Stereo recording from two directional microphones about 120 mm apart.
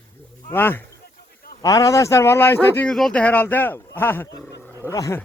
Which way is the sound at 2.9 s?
5° left (ahead or behind).